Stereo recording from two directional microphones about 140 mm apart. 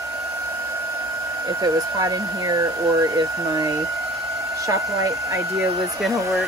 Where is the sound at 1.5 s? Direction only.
25° right (ahead or behind).